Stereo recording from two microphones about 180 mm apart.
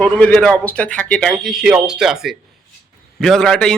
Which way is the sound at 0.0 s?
5° left (ahead or behind).